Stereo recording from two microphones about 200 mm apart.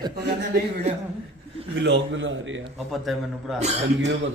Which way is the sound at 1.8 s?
65° right (ahead or behind).